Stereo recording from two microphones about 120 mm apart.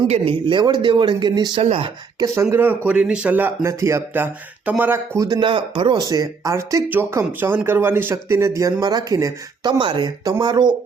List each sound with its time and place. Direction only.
0.1 s speech: 45° right (ahead or behind)
1.6 s speech: 55° right (ahead or behind)
2.1 s speech: 25° right (ahead or behind)
5.4 s speech: 45° right (ahead or behind)